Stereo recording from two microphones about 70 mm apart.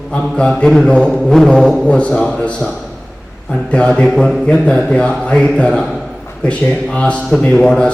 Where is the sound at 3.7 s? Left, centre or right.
Centre.